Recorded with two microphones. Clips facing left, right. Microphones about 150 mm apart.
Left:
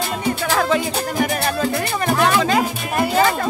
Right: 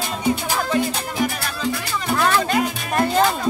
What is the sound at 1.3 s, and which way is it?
Music, 55° left (ahead or behind).